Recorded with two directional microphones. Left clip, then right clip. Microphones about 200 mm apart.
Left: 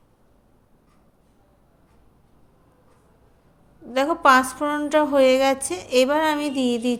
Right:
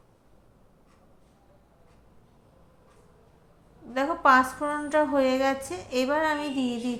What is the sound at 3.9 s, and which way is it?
A woman's voice, 45° left (ahead or behind).